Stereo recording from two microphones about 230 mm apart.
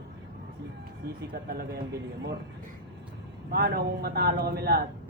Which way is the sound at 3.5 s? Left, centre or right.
Right.